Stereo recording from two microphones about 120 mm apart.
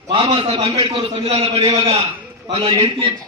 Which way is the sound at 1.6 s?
40° right (ahead or behind).